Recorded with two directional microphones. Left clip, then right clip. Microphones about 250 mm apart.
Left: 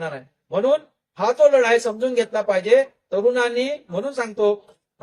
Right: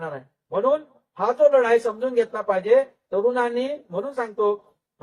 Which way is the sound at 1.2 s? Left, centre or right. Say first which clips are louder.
Left 2 dB; left.